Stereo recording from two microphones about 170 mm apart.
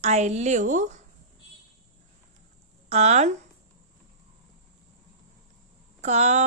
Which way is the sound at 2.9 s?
40° right (ahead or behind).